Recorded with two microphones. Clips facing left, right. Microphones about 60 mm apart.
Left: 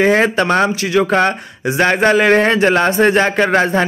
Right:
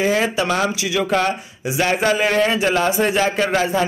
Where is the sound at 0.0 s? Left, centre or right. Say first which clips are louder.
Left 6 dB; left.